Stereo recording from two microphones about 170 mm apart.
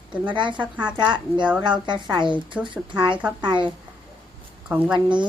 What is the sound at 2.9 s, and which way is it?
Speech, 30° right (ahead or behind).